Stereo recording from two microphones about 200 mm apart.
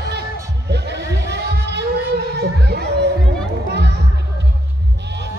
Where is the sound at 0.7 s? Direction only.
60° right (ahead or behind).